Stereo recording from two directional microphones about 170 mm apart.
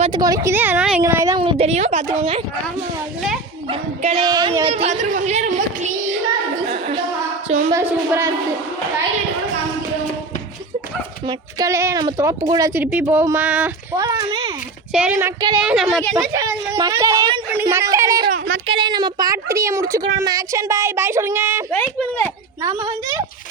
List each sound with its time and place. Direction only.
0.0 s a woman's voice: 25° right (ahead or behind)
1.4 s a woman's voice: 35° right (ahead or behind)
3.7 s speech: 30° right (ahead or behind)
4.7 s a woman's voice: 40° right (ahead or behind)
6.7 s a sound: 40° right (ahead or behind)
7.7 s speech: 20° right (ahead or behind)
11.3 s a woman's voice: 20° right (ahead or behind)
13.9 s speech: 20° right (ahead or behind)
14.9 s a woman's voice: 10° right (ahead or behind)
16.3 s a woman's voice: 20° right (ahead or behind)
21.7 s speech: 10° left (ahead or behind)
22.6 s speech: 20° right (ahead or behind)